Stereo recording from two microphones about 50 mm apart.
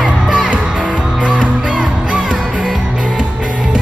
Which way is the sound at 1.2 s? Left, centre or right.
Right.